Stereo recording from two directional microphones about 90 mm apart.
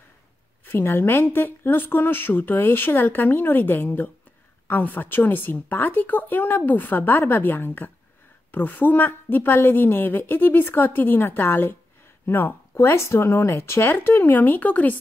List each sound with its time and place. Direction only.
0.7 s a woman's voice: 25° left (ahead or behind)